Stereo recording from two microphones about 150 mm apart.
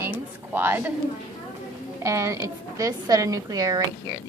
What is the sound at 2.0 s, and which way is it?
A woman's voice, 20° right (ahead or behind).